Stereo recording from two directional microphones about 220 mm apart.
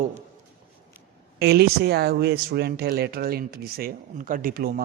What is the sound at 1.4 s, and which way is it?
Speech, 50° right (ahead or behind).